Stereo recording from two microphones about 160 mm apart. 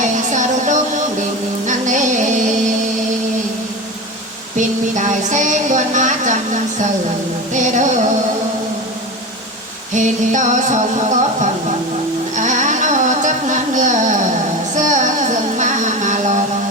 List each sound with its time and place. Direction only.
0.0 s a sound: 50° right (ahead or behind)
1.6 s music: 50° right (ahead or behind)
4.5 s a woman's voice: 50° right (ahead or behind)
9.9 s a woman's voice: 50° right (ahead or behind)
12.4 s carnatic music: 50° right (ahead or behind)
14.8 s a sound: 50° right (ahead or behind)